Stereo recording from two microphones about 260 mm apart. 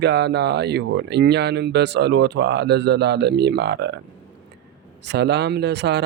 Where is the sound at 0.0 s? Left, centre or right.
Right.